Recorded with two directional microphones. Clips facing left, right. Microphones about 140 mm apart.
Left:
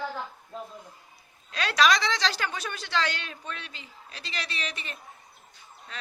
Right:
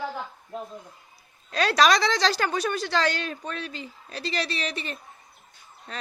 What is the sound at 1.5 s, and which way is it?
A woman's voice, 40° right (ahead or behind).